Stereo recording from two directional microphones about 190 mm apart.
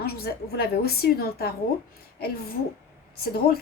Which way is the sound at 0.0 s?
55° left (ahead or behind).